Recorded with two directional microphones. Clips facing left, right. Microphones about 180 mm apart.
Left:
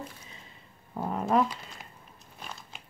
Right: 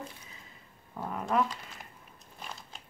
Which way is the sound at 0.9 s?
35° left (ahead or behind).